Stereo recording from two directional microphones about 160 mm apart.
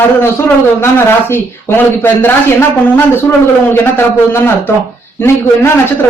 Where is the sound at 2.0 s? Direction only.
15° left (ahead or behind).